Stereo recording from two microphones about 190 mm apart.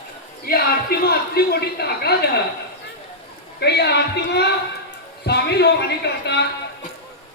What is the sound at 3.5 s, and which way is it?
A man's voice, 60° left (ahead or behind).